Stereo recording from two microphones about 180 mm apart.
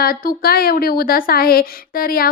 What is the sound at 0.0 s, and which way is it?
A woman's voice, 55° left (ahead or behind).